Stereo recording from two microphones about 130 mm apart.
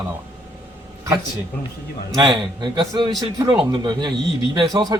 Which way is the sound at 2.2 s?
35° right (ahead or behind).